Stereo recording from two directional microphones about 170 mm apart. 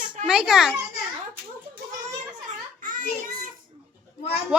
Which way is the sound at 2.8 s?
55° right (ahead or behind).